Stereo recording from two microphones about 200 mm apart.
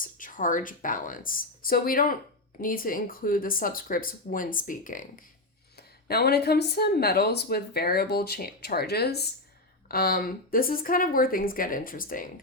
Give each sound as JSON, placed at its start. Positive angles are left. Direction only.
{"t": 0.0, "sound": "speech", "side_deg": 40}